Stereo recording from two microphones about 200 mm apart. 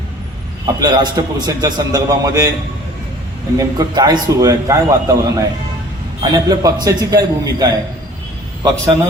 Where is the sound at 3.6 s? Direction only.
20° right (ahead or behind).